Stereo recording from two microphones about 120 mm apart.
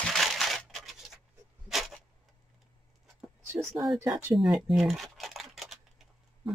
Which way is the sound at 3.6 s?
Centre (ahead or behind).